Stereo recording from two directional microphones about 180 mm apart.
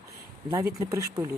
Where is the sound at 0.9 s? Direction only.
20° right (ahead or behind).